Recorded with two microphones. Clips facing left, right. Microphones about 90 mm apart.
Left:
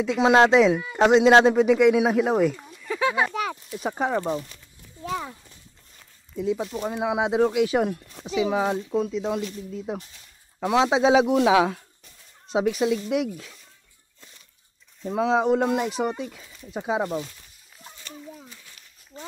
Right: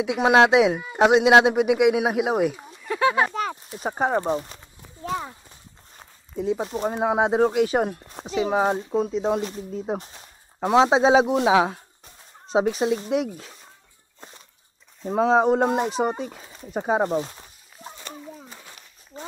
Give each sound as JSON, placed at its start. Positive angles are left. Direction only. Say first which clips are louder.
{"t": 0.0, "sound": "speech", "louder": "even", "side_deg": -15}
{"t": 2.9, "sound": "speech", "louder": "right 3 dB", "side_deg": -5}
{"t": 3.3, "sound": "speech", "louder": "right 1 dB", "side_deg": -30}
{"t": 5.1, "sound": "horse", "louder": "right 1 dB", "side_deg": -20}
{"t": 5.9, "sound": "speech", "louder": "right 2 dB", "side_deg": -45}
{"t": 15.0, "sound": "speech", "louder": "right 3 dB", "side_deg": -40}
{"t": 16.7, "sound": "a sound", "louder": "right 4 dB", "side_deg": -45}
{"t": 18.5, "sound": "a sound", "louder": "right 5 dB", "side_deg": -50}
{"t": 19.1, "sound": "a sound", "louder": "right 2 dB", "side_deg": -20}